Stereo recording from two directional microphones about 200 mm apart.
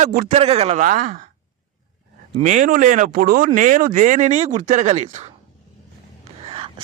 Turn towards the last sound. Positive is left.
turn(degrees=-25)  # may be behind; listen again after turning